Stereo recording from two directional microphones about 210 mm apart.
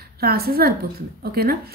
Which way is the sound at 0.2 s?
45° right (ahead or behind).